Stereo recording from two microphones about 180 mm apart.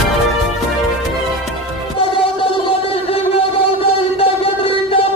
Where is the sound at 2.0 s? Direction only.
30° left (ahead or behind).